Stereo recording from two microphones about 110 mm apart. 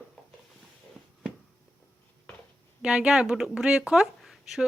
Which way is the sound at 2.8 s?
5° right (ahead or behind).